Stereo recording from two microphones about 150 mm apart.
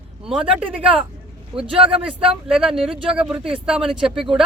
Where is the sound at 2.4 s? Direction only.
5° right (ahead or behind).